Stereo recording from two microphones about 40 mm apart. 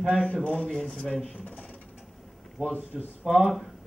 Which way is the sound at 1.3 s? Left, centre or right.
Left.